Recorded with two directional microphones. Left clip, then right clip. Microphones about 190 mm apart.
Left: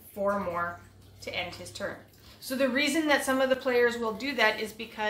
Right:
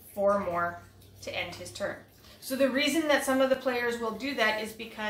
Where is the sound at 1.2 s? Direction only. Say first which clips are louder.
Even; 30° left (ahead or behind).